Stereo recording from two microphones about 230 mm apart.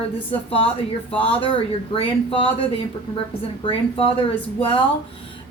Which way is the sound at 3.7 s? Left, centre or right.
Left.